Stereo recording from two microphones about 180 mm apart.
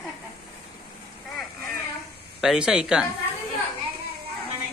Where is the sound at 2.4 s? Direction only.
5° right (ahead or behind).